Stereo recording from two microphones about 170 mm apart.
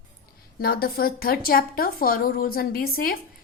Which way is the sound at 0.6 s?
60° left (ahead or behind).